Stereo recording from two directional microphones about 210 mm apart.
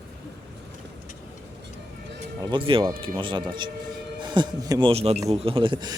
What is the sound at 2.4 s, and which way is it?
A man's voice, 25° right (ahead or behind).